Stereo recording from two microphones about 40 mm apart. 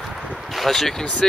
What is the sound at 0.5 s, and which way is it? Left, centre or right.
Speech, centre.